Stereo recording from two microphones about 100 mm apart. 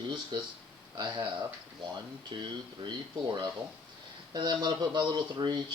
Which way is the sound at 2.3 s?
55° right (ahead or behind).